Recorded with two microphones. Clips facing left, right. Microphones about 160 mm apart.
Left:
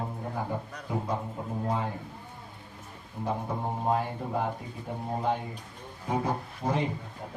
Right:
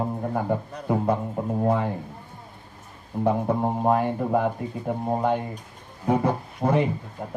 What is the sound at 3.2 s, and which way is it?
Speech, 60° right (ahead or behind).